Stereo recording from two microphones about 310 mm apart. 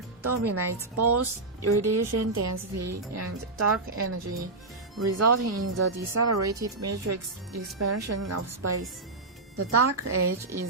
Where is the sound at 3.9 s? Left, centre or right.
Right.